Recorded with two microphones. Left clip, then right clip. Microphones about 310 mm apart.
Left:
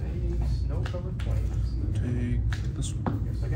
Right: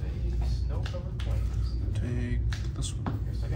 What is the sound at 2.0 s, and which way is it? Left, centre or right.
Music, right.